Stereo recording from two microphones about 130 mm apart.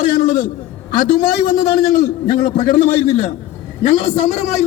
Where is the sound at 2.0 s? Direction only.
65° left (ahead or behind).